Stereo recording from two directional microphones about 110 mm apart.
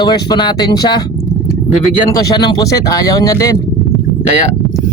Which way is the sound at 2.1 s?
35° left (ahead or behind).